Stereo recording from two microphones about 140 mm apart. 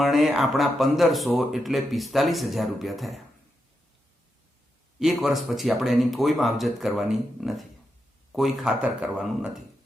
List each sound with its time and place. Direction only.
0.0 s speech: centre (ahead or behind)
4.9 s speech: centre (ahead or behind)